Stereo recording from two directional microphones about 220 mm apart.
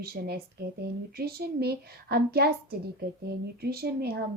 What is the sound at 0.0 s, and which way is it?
A woman's voice, 45° right (ahead or behind).